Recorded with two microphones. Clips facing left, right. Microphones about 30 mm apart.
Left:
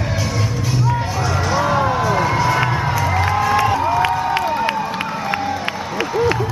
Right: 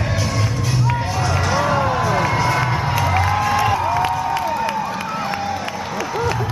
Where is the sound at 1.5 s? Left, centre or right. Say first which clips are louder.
Left 2 dB; centre.